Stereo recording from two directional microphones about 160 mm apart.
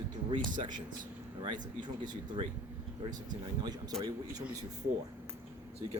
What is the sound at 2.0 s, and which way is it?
Speech, 25° right (ahead or behind).